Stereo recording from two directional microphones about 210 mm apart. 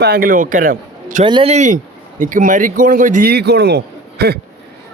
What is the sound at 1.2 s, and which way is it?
A man's voice, 25° right (ahead or behind).